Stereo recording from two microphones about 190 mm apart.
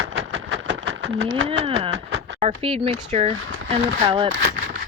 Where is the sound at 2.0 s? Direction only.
70° right (ahead or behind).